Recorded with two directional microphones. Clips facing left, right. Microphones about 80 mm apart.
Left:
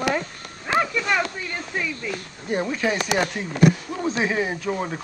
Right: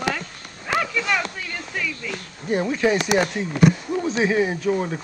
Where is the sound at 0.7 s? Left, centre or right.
Left.